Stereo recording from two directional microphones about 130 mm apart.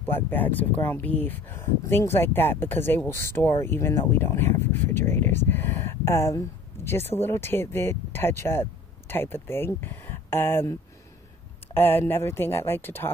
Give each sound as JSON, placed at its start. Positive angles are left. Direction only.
{"t": 0.0, "sound": "speech", "side_deg": 15}